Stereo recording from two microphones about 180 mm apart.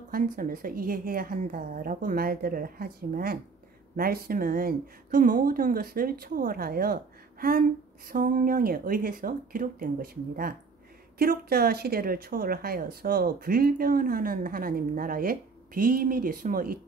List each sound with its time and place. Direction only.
0.1 s speech: 50° right (ahead or behind)